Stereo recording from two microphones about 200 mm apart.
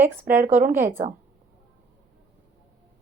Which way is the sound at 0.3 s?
40° right (ahead or behind).